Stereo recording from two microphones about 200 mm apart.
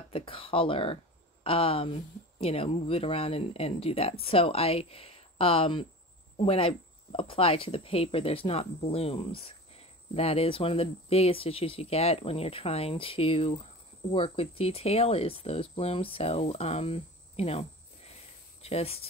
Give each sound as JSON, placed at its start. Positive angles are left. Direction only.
{"t": 0.1, "sound": "speech", "side_deg": 25}